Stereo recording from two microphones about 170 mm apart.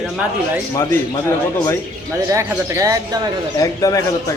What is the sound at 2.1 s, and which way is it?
Speech, 15° right (ahead or behind).